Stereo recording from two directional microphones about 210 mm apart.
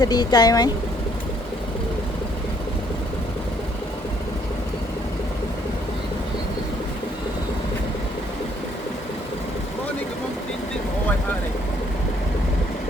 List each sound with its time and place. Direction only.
0.0 s speech: 20° left (ahead or behind)